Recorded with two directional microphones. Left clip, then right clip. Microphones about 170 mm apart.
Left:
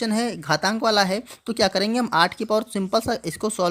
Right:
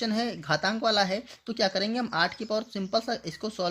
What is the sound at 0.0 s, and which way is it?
Speech, 35° left (ahead or behind).